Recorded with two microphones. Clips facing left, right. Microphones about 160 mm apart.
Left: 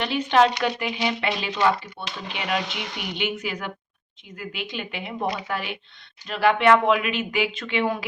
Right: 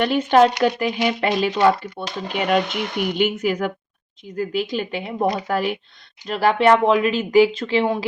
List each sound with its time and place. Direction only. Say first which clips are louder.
0.0 s speech: right 5 dB; 45° right (ahead or behind); by 8.0 s 30° right (ahead or behind)